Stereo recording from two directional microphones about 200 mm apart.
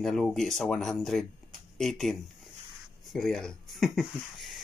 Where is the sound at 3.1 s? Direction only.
Centre (ahead or behind).